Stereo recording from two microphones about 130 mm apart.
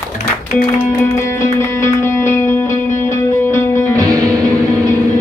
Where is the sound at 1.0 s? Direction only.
20° left (ahead or behind).